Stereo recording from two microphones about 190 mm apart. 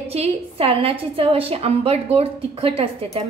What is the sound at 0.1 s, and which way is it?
A woman's voice, 30° right (ahead or behind).